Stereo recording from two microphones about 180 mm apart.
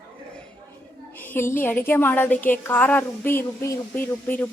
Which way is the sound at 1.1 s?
10° left (ahead or behind).